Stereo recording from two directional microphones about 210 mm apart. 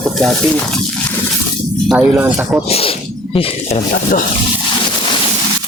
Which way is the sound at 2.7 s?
25° left (ahead or behind).